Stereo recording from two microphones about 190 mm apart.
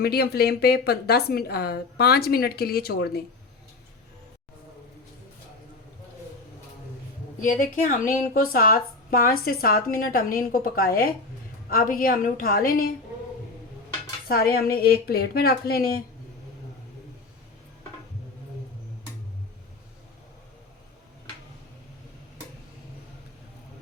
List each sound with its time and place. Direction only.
0.0 s a woman's voice: 55° left (ahead or behind)
7.4 s speech: 45° left (ahead or behind)
14.3 s speech: 50° left (ahead or behind)